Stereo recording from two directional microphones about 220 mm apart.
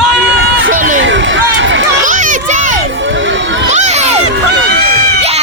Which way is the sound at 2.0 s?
35° right (ahead or behind).